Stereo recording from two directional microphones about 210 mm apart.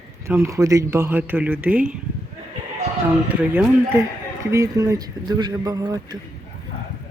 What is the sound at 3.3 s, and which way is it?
Speech, 5° right (ahead or behind).